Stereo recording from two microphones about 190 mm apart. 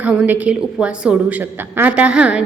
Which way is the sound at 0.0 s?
5° right (ahead or behind).